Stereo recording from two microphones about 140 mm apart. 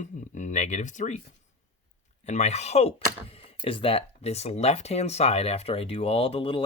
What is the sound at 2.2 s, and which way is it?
Speech, 55° left (ahead or behind).